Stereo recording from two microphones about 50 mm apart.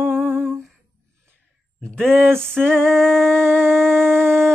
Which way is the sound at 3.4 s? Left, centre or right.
Right.